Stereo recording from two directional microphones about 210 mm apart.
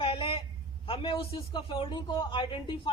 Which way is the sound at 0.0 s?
25° left (ahead or behind).